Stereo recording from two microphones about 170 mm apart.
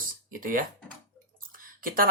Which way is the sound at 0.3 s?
55° right (ahead or behind).